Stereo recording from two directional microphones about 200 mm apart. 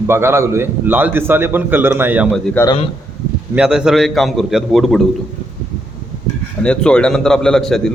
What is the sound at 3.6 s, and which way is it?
A man's voice, 5° right (ahead or behind).